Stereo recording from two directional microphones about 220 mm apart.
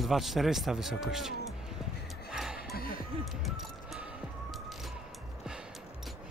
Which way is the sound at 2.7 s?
45° left (ahead or behind).